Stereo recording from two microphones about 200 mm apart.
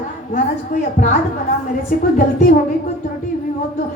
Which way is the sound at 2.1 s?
45° left (ahead or behind).